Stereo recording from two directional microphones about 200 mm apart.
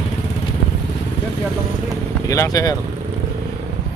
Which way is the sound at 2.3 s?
15° left (ahead or behind).